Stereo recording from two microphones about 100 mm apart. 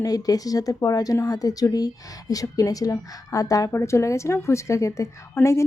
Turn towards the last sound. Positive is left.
turn(degrees=30)  # may be behind; listen again after turning